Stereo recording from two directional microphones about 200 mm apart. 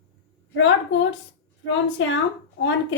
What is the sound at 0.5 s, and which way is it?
A child's voice, 65° left (ahead or behind).